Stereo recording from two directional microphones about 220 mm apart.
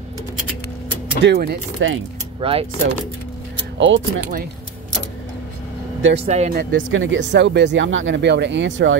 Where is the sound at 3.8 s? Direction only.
60° right (ahead or behind).